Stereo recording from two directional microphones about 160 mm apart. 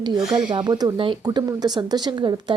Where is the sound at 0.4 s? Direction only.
25° right (ahead or behind).